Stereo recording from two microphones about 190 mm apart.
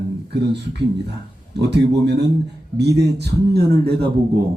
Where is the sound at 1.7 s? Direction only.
60° right (ahead or behind).